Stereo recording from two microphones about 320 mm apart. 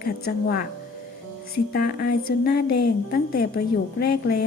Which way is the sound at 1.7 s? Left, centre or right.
Left.